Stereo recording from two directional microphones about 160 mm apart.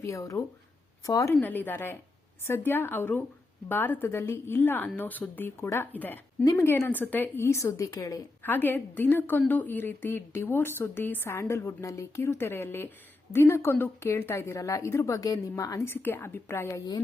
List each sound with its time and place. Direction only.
0.1 s a woman's voice: 20° left (ahead or behind)